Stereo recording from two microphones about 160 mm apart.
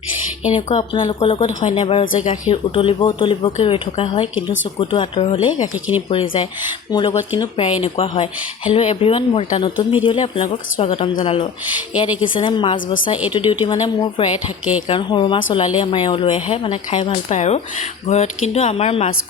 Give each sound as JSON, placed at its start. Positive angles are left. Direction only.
{"t": 0.5, "sound": "speech", "side_deg": 30}
{"t": 2.7, "sound": "speech", "side_deg": 30}